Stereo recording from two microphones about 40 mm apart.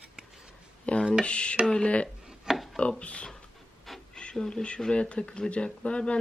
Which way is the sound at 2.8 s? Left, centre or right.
Left.